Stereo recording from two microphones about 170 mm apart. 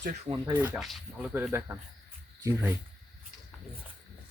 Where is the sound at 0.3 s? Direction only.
25° right (ahead or behind).